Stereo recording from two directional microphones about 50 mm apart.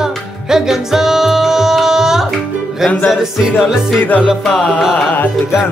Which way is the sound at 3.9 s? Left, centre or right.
Left.